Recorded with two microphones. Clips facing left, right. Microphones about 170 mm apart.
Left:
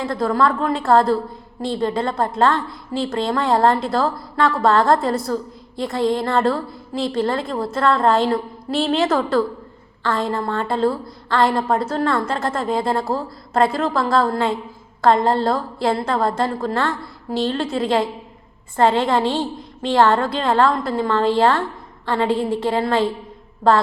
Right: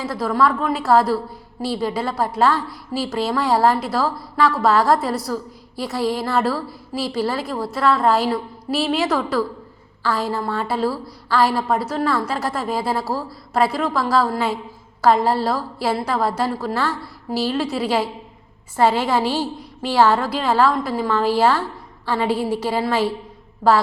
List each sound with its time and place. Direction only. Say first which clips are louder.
0.0 s a woman's voice: left 1 dB; centre (ahead or behind)
19.2 s a woman's voice: left 1 dB; 20° left (ahead or behind)
19.8 s a woman's voice: left 1 dB; 5° right (ahead or behind)